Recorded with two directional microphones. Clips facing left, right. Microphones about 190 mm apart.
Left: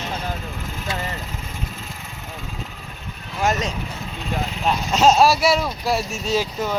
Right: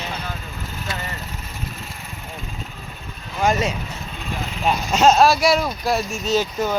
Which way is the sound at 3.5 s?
5° right (ahead or behind).